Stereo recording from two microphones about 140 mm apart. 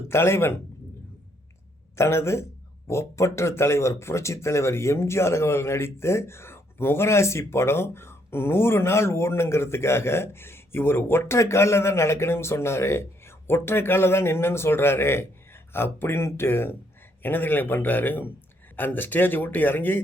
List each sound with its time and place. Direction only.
0.1 s speech: 20° left (ahead or behind)
2.0 s speech: 20° left (ahead or behind)